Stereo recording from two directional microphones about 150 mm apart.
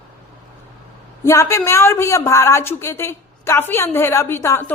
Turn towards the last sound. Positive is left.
turn(degrees=15)  # may be behind; listen again after turning